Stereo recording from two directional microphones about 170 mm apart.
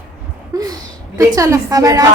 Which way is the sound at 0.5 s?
20° right (ahead or behind).